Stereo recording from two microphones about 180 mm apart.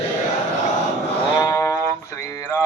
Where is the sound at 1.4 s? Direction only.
15° left (ahead or behind).